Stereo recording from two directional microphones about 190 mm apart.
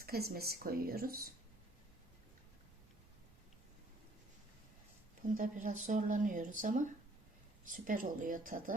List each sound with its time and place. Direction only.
0.0 s speech: 55° right (ahead or behind)
5.3 s speech: 45° right (ahead or behind)